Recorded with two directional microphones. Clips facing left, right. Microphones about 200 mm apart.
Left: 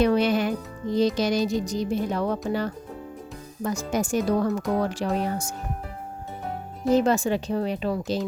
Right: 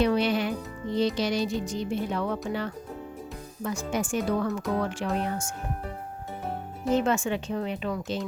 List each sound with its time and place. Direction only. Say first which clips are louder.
0.0 s music: left 3 dB; 45° left (ahead or behind)
2.5 s speech: left 4 dB; 40° left (ahead or behind)
6.9 s speech: left 4 dB; 35° left (ahead or behind)